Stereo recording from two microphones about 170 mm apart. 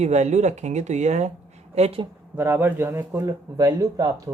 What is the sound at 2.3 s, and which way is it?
Speech, 15° right (ahead or behind).